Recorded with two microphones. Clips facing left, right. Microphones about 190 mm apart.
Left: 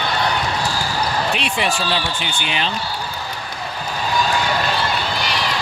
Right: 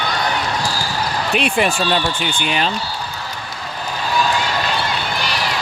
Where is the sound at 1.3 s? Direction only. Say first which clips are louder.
Right 4 dB; 50° right (ahead or behind).